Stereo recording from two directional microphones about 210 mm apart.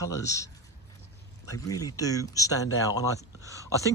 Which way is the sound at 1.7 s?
15° left (ahead or behind).